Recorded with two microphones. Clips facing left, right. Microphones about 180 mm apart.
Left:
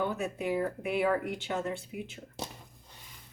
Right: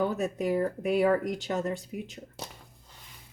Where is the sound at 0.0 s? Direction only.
40° right (ahead or behind).